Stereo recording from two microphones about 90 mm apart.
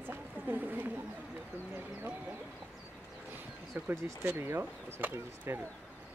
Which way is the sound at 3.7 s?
20° right (ahead or behind).